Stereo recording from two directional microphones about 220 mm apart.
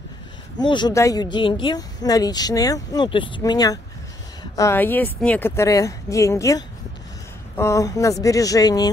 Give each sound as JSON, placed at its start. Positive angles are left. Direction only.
{"t": 0.6, "sound": "speech", "side_deg": 20}